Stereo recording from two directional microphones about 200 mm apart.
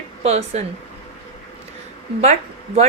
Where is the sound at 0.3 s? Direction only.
30° right (ahead or behind).